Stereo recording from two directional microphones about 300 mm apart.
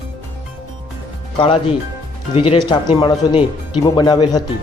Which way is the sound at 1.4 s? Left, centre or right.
Centre.